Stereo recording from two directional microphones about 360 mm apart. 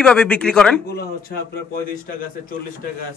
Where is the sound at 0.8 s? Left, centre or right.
Left.